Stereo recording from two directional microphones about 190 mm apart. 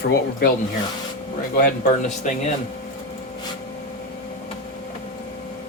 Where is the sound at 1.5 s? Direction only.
45° left (ahead or behind).